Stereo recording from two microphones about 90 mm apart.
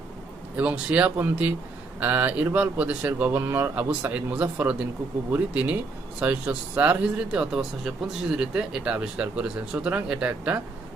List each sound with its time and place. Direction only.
0.5 s speech: 15° right (ahead or behind)